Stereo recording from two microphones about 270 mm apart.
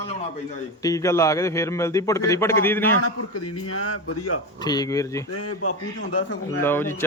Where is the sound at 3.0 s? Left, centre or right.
Left.